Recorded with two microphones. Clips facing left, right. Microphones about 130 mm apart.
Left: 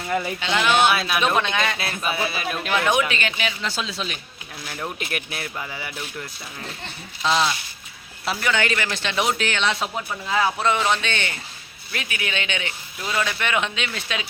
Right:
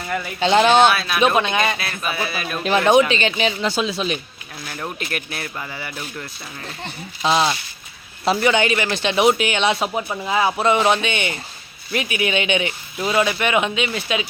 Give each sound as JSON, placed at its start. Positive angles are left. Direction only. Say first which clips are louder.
{"t": 0.3, "sound": "speech", "louder": "right 8 dB", "side_deg": -35}
{"t": 0.9, "sound": "speech", "louder": "even", "side_deg": 15}
{"t": 1.2, "sound": "speech", "louder": "right 4 dB", "side_deg": -10}
{"t": 2.0, "sound": "speech", "louder": "even", "side_deg": 25}
{"t": 2.6, "sound": "speech", "louder": "right 7 dB", "side_deg": -30}
{"t": 3.7, "sound": "speech", "louder": "right 7 dB", "side_deg": -15}
{"t": 4.9, "sound": "speech", "louder": "right 2 dB", "side_deg": 15}
{"t": 7.2, "sound": "speech", "louder": "right 3 dB", "side_deg": -20}